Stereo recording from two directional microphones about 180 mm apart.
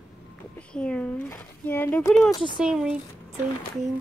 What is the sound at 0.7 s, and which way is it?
Speech, 5° left (ahead or behind).